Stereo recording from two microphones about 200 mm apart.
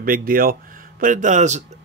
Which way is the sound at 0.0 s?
45° right (ahead or behind).